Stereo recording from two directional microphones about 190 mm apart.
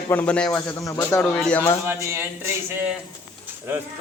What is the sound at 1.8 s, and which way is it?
Speech, 10° right (ahead or behind).